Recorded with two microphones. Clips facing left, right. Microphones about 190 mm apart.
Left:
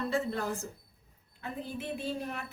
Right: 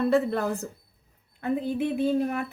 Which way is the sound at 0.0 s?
60° right (ahead or behind).